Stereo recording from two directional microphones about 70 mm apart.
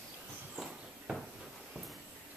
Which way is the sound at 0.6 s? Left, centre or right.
Centre.